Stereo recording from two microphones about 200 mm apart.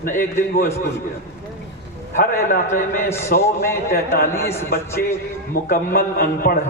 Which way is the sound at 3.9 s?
50° left (ahead or behind).